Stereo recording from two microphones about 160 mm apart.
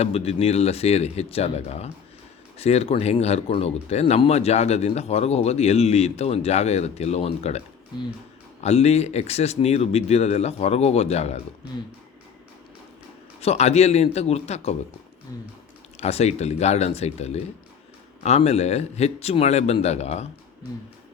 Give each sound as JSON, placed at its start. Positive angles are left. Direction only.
{"t": 0.0, "sound": "speech", "side_deg": 40}
{"t": 8.6, "sound": "speech", "side_deg": 40}
{"t": 13.4, "sound": "speech", "side_deg": 40}
{"t": 16.0, "sound": "speech", "side_deg": 40}